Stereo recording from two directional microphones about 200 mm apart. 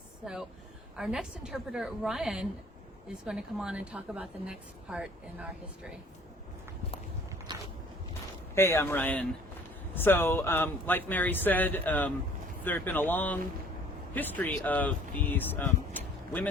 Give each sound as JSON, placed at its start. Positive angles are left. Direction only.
{"t": 0.9, "sound": "a woman's voice", "side_deg": -5}
{"t": 7.5, "sound": "a sound", "side_deg": -20}
{"t": 8.5, "sound": "speech", "side_deg": 10}